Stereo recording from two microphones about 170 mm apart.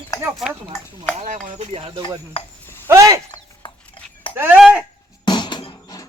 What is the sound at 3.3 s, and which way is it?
Dog, 30° left (ahead or behind).